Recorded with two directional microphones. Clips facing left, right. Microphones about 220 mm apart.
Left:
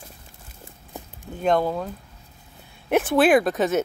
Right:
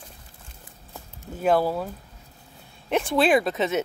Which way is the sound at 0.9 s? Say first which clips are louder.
Left 5 dB; 15° left (ahead or behind).